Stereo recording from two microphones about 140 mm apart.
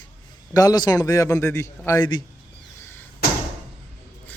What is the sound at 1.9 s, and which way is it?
Speech, 30° left (ahead or behind).